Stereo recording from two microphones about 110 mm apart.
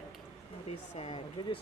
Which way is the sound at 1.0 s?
50° left (ahead or behind).